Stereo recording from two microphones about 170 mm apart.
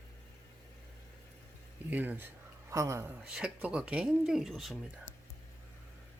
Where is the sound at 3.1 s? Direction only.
5° right (ahead or behind).